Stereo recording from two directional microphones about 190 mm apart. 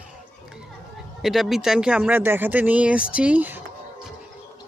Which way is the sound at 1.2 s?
Centre (ahead or behind).